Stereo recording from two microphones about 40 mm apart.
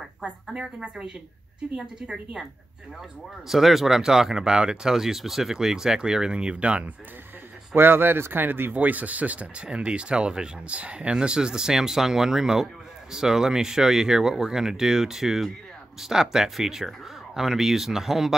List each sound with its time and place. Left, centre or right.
0.2 s speech: right
3.4 s speech: centre; by 6.8 s right
7.7 s speech: right
8.7 s speech: right
9.7 s speech: right; by 18.3 s centre